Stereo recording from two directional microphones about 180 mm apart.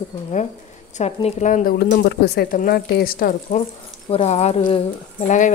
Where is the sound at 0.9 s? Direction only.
40° left (ahead or behind); by 3.3 s 55° left (ahead or behind).